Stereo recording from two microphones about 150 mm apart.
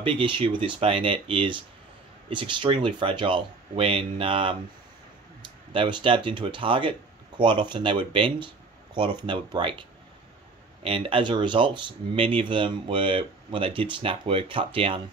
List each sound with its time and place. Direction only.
0.0 s speech: 35° right (ahead or behind)